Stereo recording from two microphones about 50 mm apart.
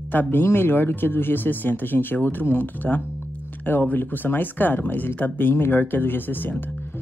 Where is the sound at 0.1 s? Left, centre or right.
Left.